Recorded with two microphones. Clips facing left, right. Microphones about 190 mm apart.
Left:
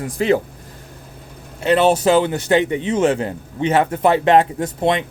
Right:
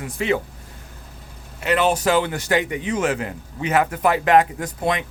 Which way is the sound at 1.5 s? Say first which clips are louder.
Left 5 dB; 30° left (ahead or behind).